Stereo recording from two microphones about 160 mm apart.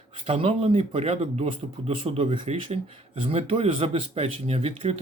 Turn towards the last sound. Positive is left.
turn(degrees=-40)  # may be behind; listen again after turning